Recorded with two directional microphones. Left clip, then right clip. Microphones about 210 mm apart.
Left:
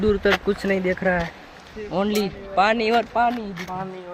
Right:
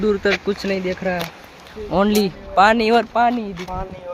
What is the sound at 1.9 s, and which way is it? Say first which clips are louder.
Speech: right 6 dB; 35° right (ahead or behind).